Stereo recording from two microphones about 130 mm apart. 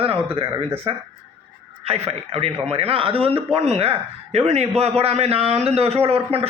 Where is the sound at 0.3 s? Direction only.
45° right (ahead or behind).